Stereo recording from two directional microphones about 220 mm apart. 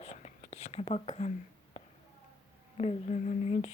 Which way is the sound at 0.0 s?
30° left (ahead or behind).